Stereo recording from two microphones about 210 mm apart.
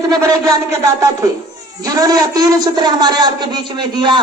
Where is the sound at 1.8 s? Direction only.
15° right (ahead or behind).